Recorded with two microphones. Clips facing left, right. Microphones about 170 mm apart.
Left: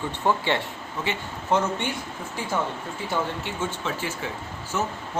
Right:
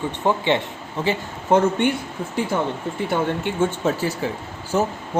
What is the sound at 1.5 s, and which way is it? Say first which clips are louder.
Speech: right 7 dB; 55° right (ahead or behind).